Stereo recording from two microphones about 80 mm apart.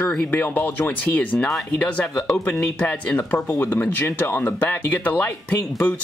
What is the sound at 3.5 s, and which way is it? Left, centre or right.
Speech, left.